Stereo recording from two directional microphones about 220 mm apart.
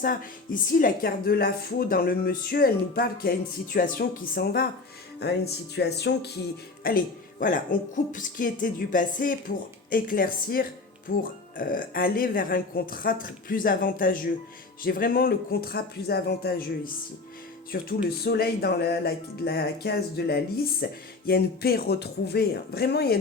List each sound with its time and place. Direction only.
0.0 s a woman's voice: 40° left (ahead or behind)